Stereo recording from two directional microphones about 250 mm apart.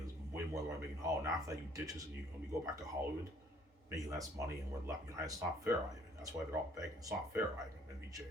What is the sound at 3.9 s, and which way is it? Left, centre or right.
Speech, centre.